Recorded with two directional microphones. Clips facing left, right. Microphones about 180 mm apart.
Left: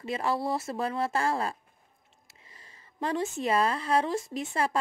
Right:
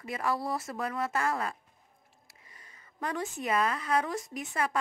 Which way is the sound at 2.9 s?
25° left (ahead or behind).